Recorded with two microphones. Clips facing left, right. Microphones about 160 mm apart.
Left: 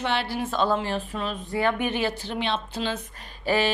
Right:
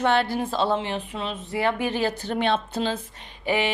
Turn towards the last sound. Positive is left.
turn(degrees=-20)  # may be behind; listen again after turning